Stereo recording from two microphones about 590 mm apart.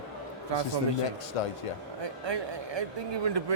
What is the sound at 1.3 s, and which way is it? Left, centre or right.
Speech, left.